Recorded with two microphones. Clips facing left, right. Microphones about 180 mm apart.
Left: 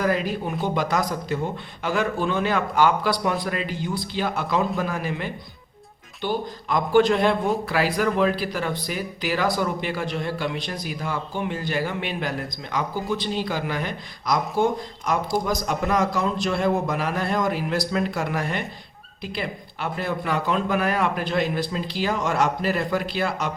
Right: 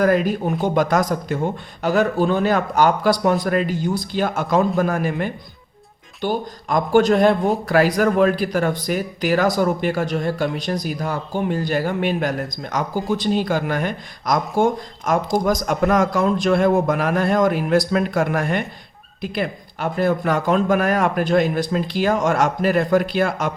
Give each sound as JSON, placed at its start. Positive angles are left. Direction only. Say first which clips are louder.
{"t": 0.0, "sound": "speech", "louder": "right 6 dB", "side_deg": -50}